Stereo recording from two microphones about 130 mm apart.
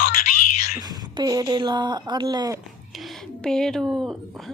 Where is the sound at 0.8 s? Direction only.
30° right (ahead or behind).